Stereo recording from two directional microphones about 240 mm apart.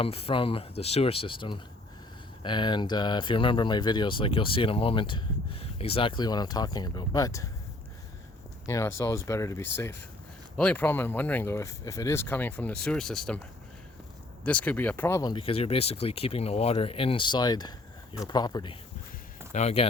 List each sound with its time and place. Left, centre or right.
0.0 s speech: left
8.6 s speech: centre
14.4 s speech: centre; by 19.9 s left